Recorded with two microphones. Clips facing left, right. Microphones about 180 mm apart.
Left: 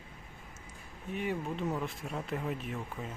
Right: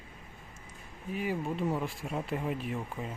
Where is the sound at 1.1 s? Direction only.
5° right (ahead or behind).